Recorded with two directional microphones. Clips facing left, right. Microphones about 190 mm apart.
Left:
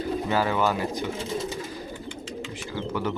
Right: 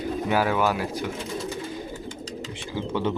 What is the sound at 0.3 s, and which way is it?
Speech, 10° right (ahead or behind).